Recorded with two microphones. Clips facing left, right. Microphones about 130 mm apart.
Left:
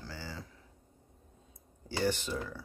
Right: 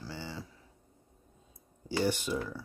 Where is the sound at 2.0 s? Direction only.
15° right (ahead or behind).